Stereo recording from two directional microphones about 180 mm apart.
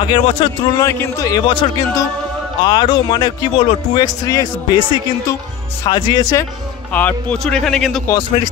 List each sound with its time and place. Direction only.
0.0 s speech: 30° left (ahead or behind)
0.8 s speech: 15° left (ahead or behind)
6.9 s a man's voice: 10° left (ahead or behind)